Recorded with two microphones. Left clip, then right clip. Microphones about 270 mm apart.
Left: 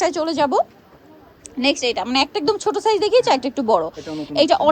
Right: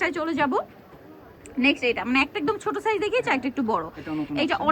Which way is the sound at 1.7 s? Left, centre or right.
Left.